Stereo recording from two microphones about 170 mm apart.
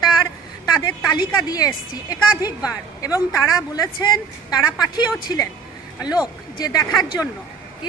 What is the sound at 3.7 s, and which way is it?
A woman's voice, 25° left (ahead or behind).